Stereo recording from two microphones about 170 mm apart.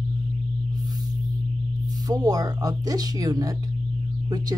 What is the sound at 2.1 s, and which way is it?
Speech, 20° right (ahead or behind).